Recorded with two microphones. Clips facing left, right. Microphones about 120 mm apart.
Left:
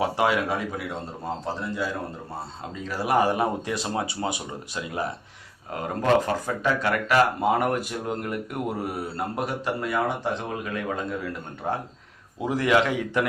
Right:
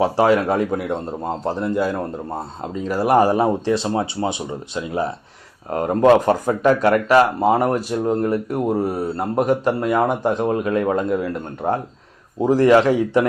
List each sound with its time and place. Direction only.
0.0 s speech: 35° right (ahead or behind)
6.2 s speech: 50° right (ahead or behind)